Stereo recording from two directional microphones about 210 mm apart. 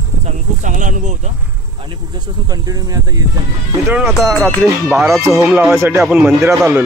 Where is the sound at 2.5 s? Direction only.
15° right (ahead or behind).